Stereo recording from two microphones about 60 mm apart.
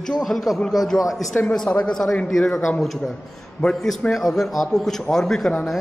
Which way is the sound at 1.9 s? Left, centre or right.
Centre.